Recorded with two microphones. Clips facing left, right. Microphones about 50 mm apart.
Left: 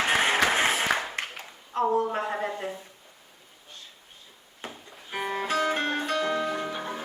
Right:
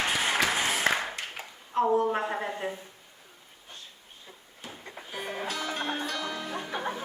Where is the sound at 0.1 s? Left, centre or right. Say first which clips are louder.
Left 4 dB; left.